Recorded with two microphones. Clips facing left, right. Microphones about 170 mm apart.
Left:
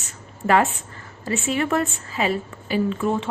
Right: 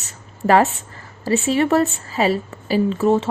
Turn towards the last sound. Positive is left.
turn(degrees=-35)  # may be behind; listen again after turning